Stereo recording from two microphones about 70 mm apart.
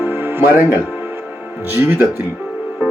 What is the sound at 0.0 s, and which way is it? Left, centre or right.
Music, right.